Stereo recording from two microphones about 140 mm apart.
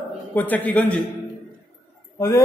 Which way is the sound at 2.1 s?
20° left (ahead or behind).